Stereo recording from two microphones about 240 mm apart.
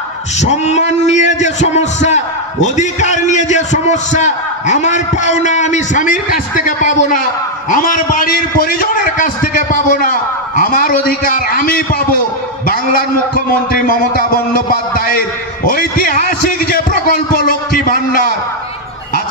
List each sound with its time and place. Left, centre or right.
0.4 s a man's voice: left
13.7 s a man's voice: left
14.7 s a sound: left